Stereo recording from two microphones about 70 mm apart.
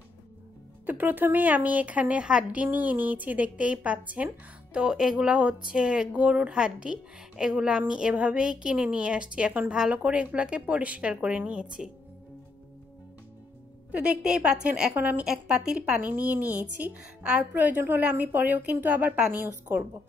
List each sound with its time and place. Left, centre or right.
0.8 s a woman's voice: right
13.9 s speech: centre
15.0 s a woman's voice: right
15.2 s speech: centre
17.2 s a woman's voice: centre
17.6 s a woman's voice: right